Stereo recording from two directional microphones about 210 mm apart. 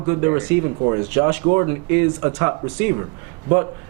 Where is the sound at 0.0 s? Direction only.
15° right (ahead or behind).